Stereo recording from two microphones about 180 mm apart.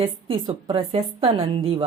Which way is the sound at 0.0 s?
30° right (ahead or behind).